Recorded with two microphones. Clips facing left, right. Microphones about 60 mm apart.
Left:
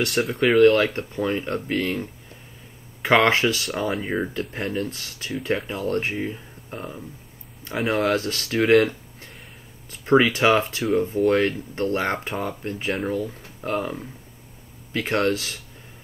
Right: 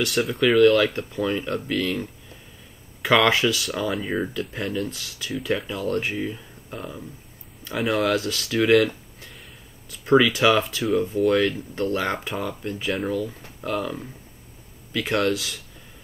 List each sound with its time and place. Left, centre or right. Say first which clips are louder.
0.1 s speech: even; centre
0.6 s speech: left 1 dB; left
3.6 s speech: left 1 dB; centre
4.3 s speech: even; left
7.9 s speech: even; left
8.6 s a sound: left 1 dB; left
9.8 s speech: even; left
12.8 s speech: even; centre
13.7 s speech: left 1 dB; left